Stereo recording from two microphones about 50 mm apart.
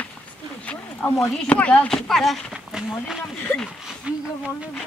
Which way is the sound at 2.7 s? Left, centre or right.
Centre.